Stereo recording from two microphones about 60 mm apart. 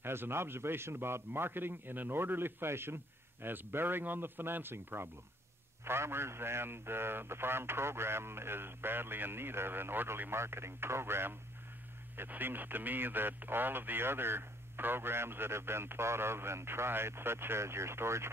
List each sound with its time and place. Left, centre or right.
0.0 s speech: right
12.3 s speech: right